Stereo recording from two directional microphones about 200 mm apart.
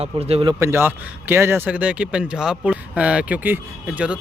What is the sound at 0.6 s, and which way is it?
Speech, 10° right (ahead or behind).